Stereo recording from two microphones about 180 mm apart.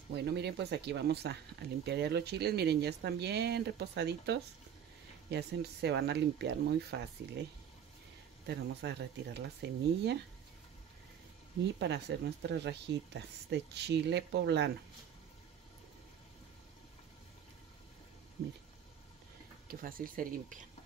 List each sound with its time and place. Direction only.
0.1 s speech: 70° right (ahead or behind)
8.5 s speech: 70° right (ahead or behind)
11.6 s speech: 70° right (ahead or behind)
19.7 s speech: 55° right (ahead or behind)